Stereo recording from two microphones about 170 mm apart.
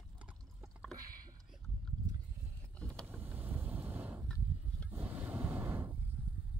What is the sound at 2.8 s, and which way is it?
Vehicle, 5° left (ahead or behind).